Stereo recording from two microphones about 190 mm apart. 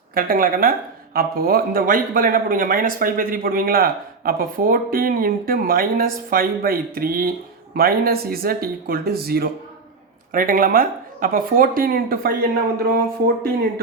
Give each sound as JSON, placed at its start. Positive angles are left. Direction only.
{"t": 0.1, "sound": "a man's voice", "side_deg": -50}